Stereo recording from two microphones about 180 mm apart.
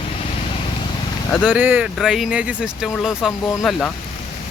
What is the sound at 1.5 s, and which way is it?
Speech, 10° right (ahead or behind).